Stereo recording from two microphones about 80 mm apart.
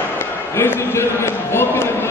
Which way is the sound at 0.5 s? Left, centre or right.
Left.